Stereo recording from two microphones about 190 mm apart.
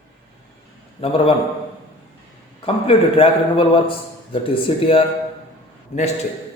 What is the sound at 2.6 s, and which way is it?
A man's voice, 30° left (ahead or behind).